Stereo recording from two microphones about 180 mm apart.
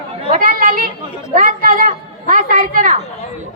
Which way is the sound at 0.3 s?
50° right (ahead or behind).